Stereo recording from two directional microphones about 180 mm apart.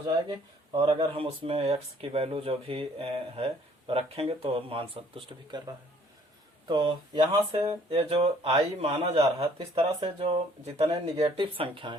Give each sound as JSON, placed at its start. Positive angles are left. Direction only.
{"t": 0.0, "sound": "speech", "side_deg": -25}